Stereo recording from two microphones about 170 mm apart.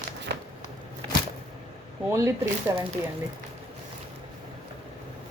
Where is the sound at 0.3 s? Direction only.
75° right (ahead or behind).